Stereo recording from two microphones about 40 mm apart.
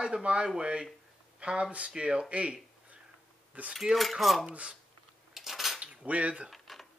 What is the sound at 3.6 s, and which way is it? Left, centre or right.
Speech, right.